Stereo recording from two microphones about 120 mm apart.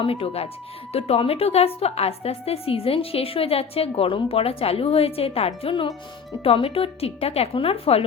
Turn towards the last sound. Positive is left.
turn(degrees=55)  # may be behind; listen again after turning